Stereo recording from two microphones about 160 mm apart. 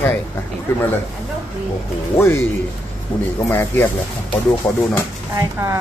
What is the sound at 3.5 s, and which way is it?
Speech, 15° left (ahead or behind).